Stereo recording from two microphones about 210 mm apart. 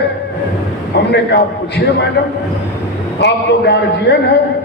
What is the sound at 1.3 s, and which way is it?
Speech, 55° left (ahead or behind).